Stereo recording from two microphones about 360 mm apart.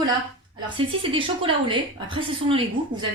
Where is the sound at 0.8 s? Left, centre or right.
Centre.